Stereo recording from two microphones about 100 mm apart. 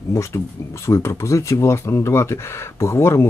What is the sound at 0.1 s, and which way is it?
Speech, 30° left (ahead or behind).